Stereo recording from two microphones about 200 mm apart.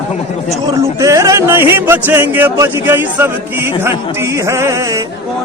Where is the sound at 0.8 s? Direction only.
15° right (ahead or behind).